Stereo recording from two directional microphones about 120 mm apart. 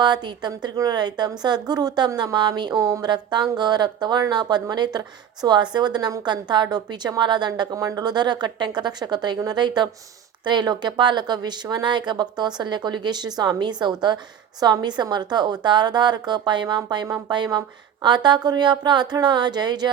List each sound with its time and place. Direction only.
0.0 s a woman's voice: 40° right (ahead or behind)